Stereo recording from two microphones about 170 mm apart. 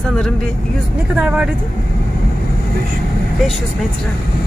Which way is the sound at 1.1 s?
5° right (ahead or behind).